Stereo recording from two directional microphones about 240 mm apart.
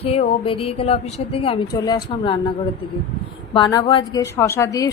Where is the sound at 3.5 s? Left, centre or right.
Centre.